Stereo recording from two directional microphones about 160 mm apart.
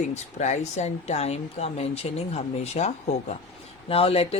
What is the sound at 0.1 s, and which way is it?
Speech, 45° left (ahead or behind).